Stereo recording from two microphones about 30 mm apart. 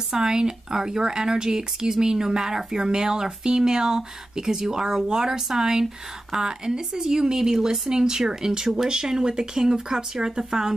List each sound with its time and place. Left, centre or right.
0.1 s speech: right